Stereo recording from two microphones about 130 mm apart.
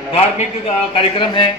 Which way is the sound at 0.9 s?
40° left (ahead or behind).